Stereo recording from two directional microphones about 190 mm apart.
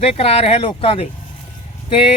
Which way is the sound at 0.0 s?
30° left (ahead or behind).